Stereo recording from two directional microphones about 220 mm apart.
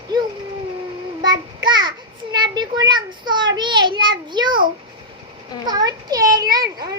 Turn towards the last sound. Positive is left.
turn(degrees=-15)  # may be behind; listen again after turning